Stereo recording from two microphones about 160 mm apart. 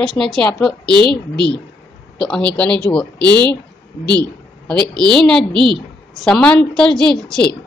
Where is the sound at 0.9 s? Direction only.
30° right (ahead or behind).